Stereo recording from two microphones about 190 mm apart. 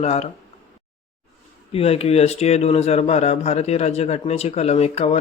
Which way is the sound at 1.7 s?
30° left (ahead or behind).